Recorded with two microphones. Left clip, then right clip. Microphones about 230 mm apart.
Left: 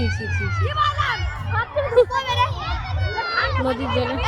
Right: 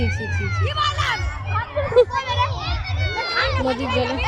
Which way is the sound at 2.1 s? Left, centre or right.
Left.